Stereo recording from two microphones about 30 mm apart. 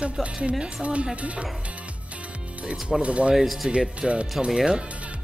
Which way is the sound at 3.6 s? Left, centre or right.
Centre.